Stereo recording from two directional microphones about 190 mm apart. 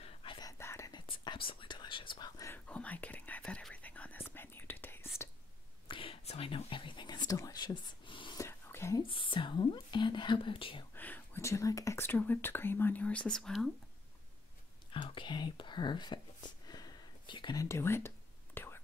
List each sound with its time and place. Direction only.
0.0 s whispering: 25° left (ahead or behind); by 5.1 s 10° left (ahead or behind)
5.9 s whispering: 30° left (ahead or behind)
8.5 s whispering: 15° left (ahead or behind)
9.0 s whispering: 25° left (ahead or behind)
11.0 s whispering: 10° left (ahead or behind)
14.9 s whispering: 25° left (ahead or behind)